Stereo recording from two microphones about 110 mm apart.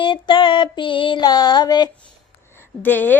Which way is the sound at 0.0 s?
50° left (ahead or behind).